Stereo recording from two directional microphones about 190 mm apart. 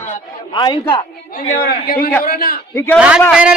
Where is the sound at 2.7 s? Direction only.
10° left (ahead or behind).